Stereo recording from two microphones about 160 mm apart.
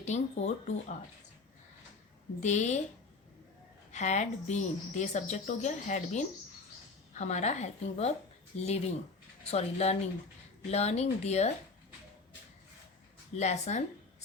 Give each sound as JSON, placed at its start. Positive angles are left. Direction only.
{"t": 0.0, "sound": "a woman's voice", "side_deg": 45}
{"t": 2.4, "sound": "a woman's voice", "side_deg": 45}
{"t": 3.9, "sound": "a woman's voice", "side_deg": 45}
{"t": 13.3, "sound": "a woman's voice", "side_deg": 45}